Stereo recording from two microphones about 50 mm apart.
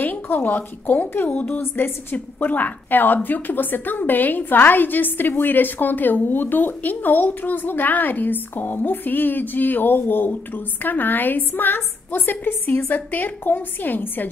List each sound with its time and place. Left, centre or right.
0.0 s a woman's voice: left
1.6 s a woman's voice: left